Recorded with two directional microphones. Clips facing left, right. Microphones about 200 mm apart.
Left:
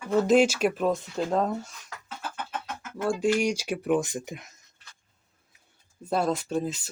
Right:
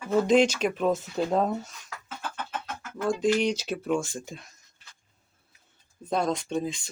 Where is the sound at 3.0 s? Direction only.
10° left (ahead or behind).